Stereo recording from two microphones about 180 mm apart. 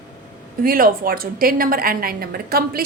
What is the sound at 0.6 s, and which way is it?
A woman's voice, 55° right (ahead or behind).